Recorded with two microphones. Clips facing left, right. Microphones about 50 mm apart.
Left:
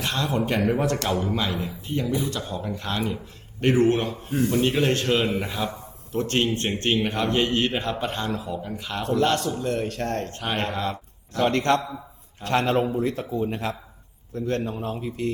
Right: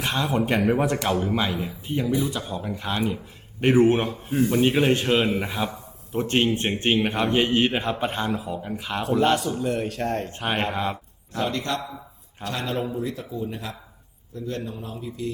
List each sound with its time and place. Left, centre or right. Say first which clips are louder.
0.0 s a man's voice: right 1 dB; centre
11.4 s a man's voice: left 7 dB; left